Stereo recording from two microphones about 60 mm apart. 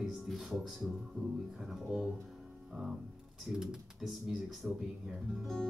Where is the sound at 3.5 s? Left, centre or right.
Centre.